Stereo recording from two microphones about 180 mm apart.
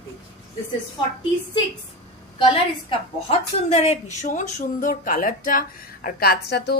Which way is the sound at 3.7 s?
40° left (ahead or behind).